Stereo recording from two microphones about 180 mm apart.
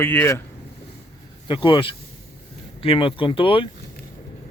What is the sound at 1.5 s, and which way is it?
Speech, 30° left (ahead or behind).